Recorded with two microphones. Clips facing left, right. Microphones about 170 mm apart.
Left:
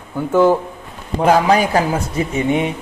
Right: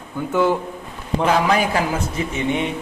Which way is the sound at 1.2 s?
40° left (ahead or behind).